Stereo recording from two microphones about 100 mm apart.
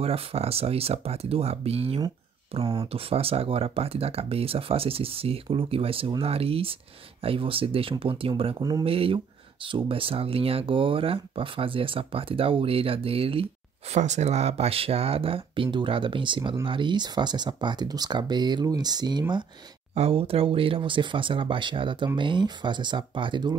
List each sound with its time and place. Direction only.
0.0 s speech: 85° right
2.5 s speech: 65° right (ahead or behind)
2.9 s speech: 75° right (ahead or behind)
13.9 s speech: 90° right; by 19.4 s 45° right (ahead or behind)
19.9 s speech: 80° right; by 23.5 s 55° right (ahead or behind)